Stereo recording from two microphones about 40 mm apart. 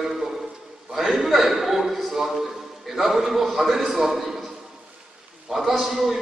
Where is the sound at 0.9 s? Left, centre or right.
Centre.